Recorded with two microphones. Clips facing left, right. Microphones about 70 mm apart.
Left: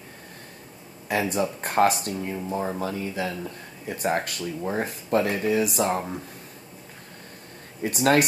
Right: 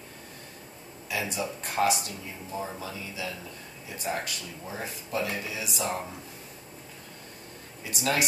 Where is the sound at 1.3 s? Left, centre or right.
Left.